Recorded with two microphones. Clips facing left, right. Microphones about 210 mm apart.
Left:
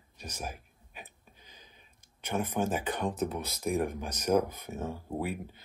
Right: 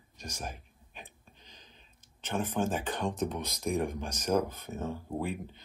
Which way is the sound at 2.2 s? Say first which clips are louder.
Even; 10° left (ahead or behind).